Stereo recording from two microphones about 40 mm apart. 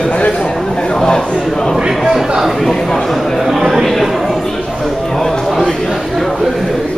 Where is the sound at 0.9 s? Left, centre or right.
Centre.